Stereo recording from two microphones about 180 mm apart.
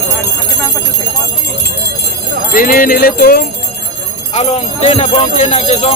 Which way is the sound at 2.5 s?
50° left (ahead or behind).